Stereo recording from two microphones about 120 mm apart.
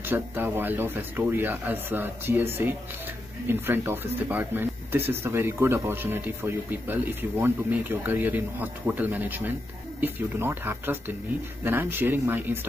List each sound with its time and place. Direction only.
0.0 s speech: 15° right (ahead or behind)